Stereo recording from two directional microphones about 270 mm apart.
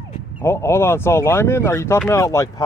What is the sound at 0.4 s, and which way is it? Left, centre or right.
Speech, centre.